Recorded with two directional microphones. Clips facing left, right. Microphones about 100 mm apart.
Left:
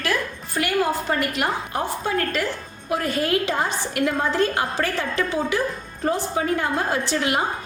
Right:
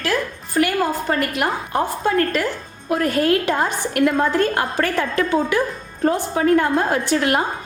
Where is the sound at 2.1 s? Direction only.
45° right (ahead or behind).